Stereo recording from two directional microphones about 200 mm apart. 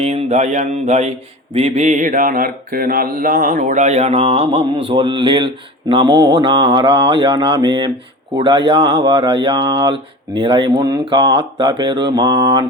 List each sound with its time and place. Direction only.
0.0 s speech: 35° right (ahead or behind); by 12.6 s 20° right (ahead or behind)